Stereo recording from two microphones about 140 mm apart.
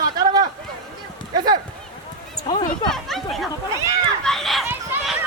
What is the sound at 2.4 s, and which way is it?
Speech, 30° left (ahead or behind).